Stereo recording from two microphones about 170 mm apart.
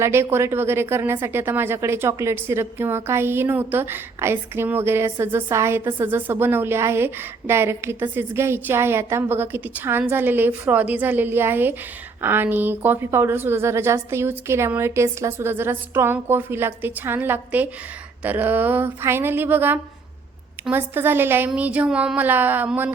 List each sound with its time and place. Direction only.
0.0 s speech: 15° right (ahead or behind)